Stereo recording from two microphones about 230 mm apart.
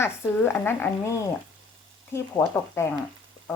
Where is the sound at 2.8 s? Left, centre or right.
Centre.